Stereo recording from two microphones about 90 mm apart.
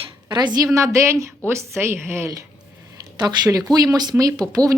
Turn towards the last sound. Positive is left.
turn(degrees=-40)  # may be behind; listen again after turning